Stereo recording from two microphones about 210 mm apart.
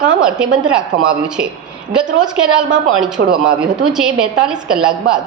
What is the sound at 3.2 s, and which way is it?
Speech, 55° right (ahead or behind).